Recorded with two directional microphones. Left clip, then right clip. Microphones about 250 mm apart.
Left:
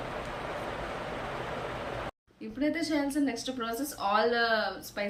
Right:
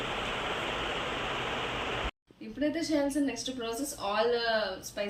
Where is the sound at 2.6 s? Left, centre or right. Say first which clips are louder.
Even; centre.